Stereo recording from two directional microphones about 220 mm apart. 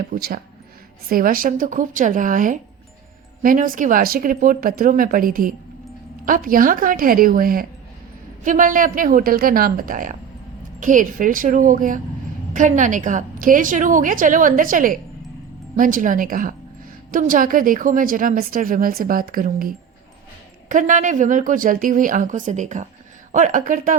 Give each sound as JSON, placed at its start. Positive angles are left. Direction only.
{"t": 0.1, "sound": "a woman's voice", "side_deg": -40}